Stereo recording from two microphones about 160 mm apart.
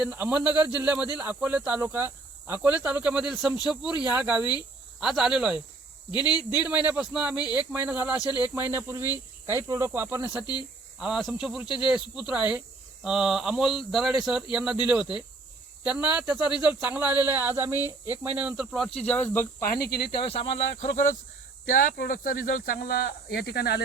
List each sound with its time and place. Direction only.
0.0 s speech: 10° right (ahead or behind)
6.1 s speech: 25° left (ahead or behind)
6.8 s speech: 10° right (ahead or behind)
8.2 s speech: 25° left (ahead or behind)
8.5 s speech: 15° right (ahead or behind)
10.4 s speech: 30° left (ahead or behind)
11.0 s speech: 5° right (ahead or behind)
11.6 s speech: 30° left (ahead or behind)
11.9 s speech: 5° right (ahead or behind)
18.9 s speech: 10° left (ahead or behind)
19.8 s speech: 80° left
20.1 s speech: 35° left (ahead or behind)
21.7 s speech: 60° left (ahead or behind); by 23.8 s 90° left